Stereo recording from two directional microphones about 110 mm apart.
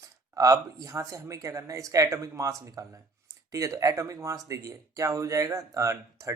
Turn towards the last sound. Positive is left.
turn(degrees=-30)  # may be behind; listen again after turning